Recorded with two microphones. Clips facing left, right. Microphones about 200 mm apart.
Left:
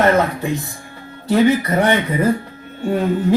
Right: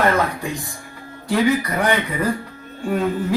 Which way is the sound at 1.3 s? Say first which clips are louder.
Left 4 dB; 25° left (ahead or behind).